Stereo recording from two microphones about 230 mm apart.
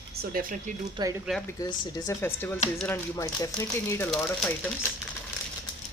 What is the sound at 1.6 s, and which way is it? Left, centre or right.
Speech, centre.